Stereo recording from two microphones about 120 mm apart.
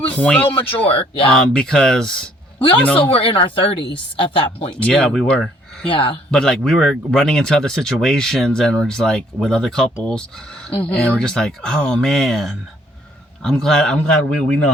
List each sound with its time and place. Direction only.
0.1 s speech: 10° left (ahead or behind)
0.9 s speech: 50° left (ahead or behind)
1.5 s speech: 5° left (ahead or behind)
2.6 s speech: 45° left (ahead or behind)
2.8 s speech: 10° left (ahead or behind)
3.1 s speech: 50° left (ahead or behind)
4.8 s speech: 10° left (ahead or behind)
5.9 s speech: 45° left (ahead or behind)
6.3 s speech: 5° left (ahead or behind)